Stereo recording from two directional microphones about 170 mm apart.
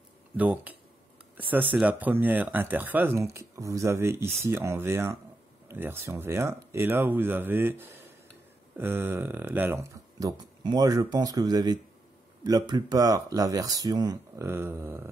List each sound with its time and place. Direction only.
0.4 s speech: 10° right (ahead or behind)